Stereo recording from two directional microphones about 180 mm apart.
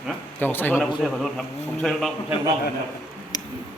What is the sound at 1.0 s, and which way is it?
Speech, centre (ahead or behind).